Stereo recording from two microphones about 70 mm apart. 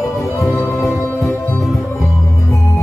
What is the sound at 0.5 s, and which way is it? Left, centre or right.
Music, centre.